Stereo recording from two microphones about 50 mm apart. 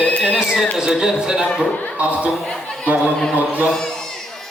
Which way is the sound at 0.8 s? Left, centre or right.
Centre.